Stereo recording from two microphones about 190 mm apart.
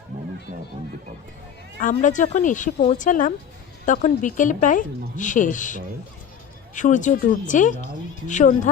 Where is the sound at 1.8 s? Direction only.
40° left (ahead or behind).